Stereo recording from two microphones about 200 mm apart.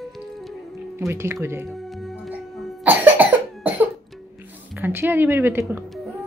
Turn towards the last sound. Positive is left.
turn(degrees=-10)  # may be behind; listen again after turning